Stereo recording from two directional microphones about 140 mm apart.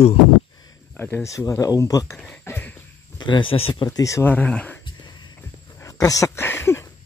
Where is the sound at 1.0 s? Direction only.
15° left (ahead or behind).